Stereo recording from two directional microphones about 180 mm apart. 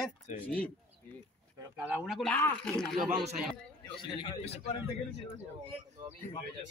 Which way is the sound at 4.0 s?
30° left (ahead or behind).